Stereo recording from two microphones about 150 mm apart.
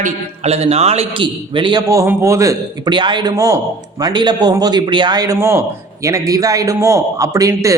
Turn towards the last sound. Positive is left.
turn(degrees=-20)  # may be behind; listen again after turning